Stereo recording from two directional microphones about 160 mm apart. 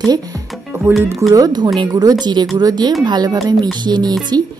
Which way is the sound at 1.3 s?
25° right (ahead or behind).